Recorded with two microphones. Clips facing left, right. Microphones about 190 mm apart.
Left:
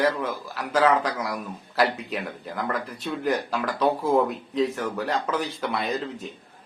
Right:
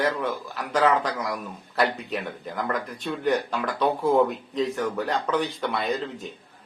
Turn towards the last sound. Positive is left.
turn(degrees=0)  # may be behind; listen again after turning